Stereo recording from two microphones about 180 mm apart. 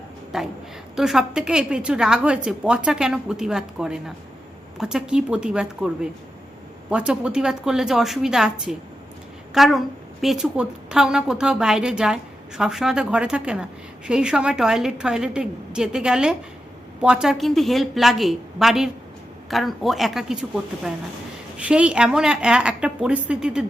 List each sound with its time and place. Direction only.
0.3 s a woman's voice: 5° right (ahead or behind)
21.6 s a woman's voice: 5° right (ahead or behind)